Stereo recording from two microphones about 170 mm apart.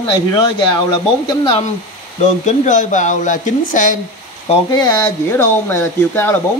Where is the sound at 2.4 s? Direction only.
45° left (ahead or behind).